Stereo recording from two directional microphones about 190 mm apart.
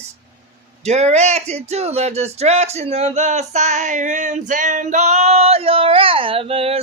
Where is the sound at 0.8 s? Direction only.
35° right (ahead or behind).